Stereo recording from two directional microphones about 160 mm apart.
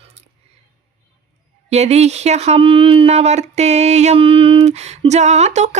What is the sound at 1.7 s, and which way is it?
Speech, 45° right (ahead or behind).